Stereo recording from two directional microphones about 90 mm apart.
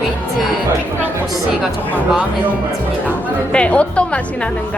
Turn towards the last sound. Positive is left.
turn(degrees=15)  # may be behind; listen again after turning